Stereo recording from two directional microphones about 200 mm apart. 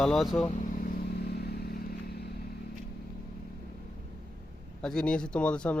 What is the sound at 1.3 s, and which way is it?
Vehicle, 50° left (ahead or behind).